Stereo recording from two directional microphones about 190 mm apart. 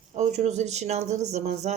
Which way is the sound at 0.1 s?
35° right (ahead or behind).